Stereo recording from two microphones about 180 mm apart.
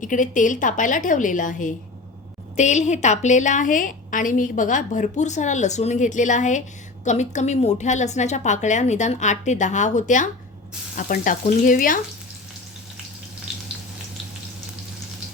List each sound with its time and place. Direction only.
0.0 s a woman's voice: 45° left (ahead or behind)